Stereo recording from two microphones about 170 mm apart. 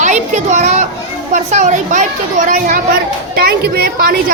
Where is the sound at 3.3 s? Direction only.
65° right (ahead or behind).